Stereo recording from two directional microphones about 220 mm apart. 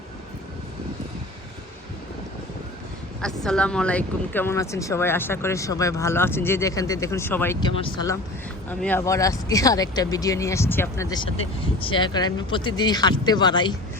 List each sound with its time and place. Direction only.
3.2 s speech: 5° left (ahead or behind)
7.7 s speech: 25° left (ahead or behind)
8.8 s speech: 10° left (ahead or behind)